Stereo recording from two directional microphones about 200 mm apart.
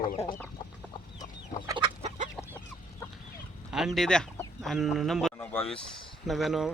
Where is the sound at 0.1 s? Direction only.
45° left (ahead or behind).